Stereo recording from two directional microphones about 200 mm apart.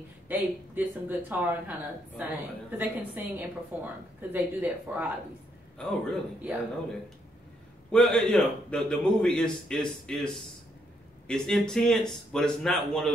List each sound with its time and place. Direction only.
0.3 s a man's voice: 10° right (ahead or behind)